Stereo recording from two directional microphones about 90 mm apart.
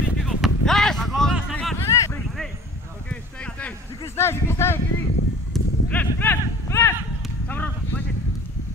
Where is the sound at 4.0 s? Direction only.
30° left (ahead or behind).